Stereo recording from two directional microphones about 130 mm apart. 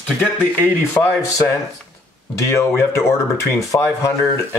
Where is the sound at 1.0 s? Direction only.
15° left (ahead or behind).